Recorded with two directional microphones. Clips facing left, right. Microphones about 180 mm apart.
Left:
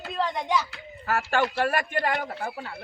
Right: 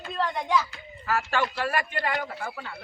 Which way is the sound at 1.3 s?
55° left (ahead or behind).